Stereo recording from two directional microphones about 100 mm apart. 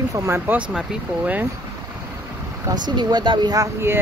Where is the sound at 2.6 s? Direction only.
45° right (ahead or behind).